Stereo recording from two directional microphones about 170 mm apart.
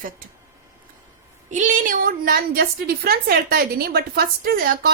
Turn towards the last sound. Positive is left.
turn(degrees=-60)  # may be behind; listen again after turning